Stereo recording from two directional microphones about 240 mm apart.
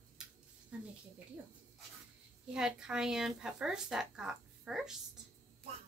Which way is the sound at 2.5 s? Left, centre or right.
Centre.